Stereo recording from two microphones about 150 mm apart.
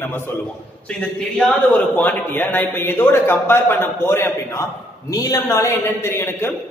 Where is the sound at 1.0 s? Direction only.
5° left (ahead or behind).